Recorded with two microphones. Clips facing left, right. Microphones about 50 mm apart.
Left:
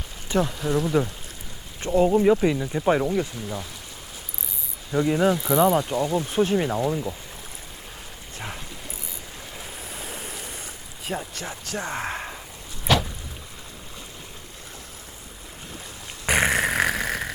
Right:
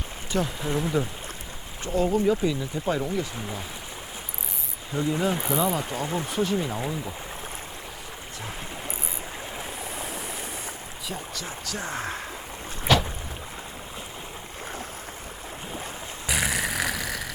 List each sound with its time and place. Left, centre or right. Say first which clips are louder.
0.3 s speech: left 4 dB; left
0.7 s speech: left 4 dB; right
1.8 s speech: left 5 dB; left
4.9 s speech: left 5 dB; left
5.5 s speech: left 6 dB; left
5.9 s speech: left 5 dB; right
6.3 s speech: left 4 dB; left
9.6 s a sound: right 1 dB; right
11.0 s speech: left 5 dB; left
12.9 s boat: even; centre
16.2 s a sound: left 6 dB; left